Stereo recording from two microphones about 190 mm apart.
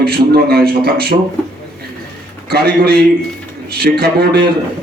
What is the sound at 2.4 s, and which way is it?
A man's voice, 55° right (ahead or behind).